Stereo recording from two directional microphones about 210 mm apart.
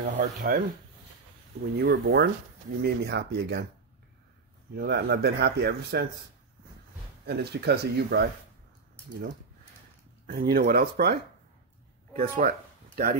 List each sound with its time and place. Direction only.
0.2 s speech: 40° right (ahead or behind)
1.8 s speech: 50° right (ahead or behind)
4.7 s speech: 50° right (ahead or behind)
7.2 s speech: 50° right (ahead or behind)
10.2 s speech: 45° right (ahead or behind)